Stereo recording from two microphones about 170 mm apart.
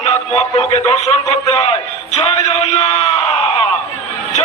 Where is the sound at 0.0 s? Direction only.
40° left (ahead or behind).